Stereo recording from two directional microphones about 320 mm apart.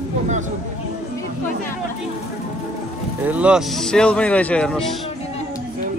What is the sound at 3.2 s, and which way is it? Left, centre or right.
Speech, centre.